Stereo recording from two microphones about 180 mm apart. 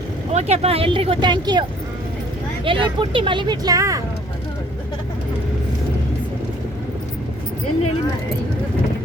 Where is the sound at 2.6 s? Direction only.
30° right (ahead or behind).